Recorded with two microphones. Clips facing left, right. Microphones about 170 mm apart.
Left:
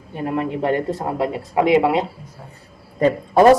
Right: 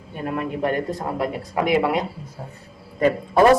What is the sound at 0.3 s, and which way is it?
Speech, 25° left (ahead or behind).